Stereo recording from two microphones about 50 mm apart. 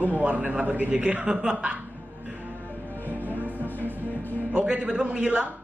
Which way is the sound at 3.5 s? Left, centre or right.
Left.